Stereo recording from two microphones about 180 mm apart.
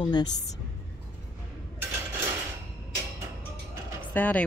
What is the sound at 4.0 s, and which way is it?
Vehicle, 10° left (ahead or behind).